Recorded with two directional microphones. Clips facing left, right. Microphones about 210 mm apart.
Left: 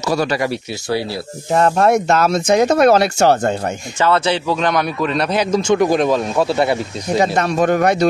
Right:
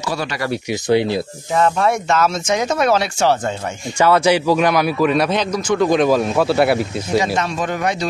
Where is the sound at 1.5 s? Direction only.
40° left (ahead or behind).